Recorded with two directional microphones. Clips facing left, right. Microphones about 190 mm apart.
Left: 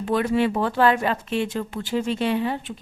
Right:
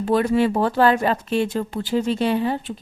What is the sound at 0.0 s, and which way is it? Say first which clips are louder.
A woman's voice: right 3 dB; 40° right (ahead or behind).